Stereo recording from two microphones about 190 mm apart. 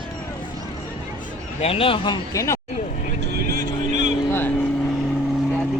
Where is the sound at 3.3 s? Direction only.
50° right (ahead or behind).